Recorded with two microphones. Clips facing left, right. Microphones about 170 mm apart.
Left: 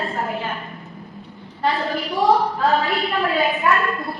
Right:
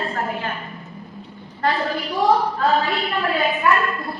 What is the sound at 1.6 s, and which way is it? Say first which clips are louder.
A woman's voice: even; centre (ahead or behind).